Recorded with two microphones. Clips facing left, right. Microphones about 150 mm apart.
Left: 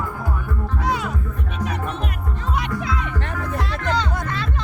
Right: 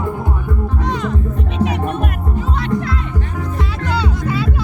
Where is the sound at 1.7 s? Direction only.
55° right (ahead or behind).